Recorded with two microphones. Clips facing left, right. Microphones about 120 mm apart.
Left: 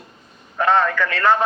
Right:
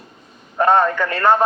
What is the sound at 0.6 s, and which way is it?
Speech, 40° right (ahead or behind).